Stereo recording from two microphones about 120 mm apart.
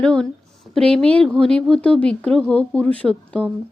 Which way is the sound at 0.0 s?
5° left (ahead or behind).